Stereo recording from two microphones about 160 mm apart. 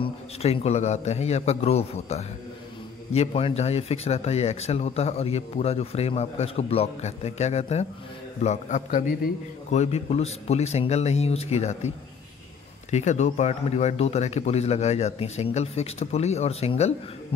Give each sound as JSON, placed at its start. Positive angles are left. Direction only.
{"t": 0.0, "sound": "a man's voice", "side_deg": 40}
{"t": 12.9, "sound": "speech", "side_deg": 45}